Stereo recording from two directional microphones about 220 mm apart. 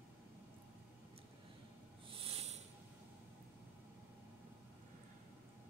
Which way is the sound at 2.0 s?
25° right (ahead or behind).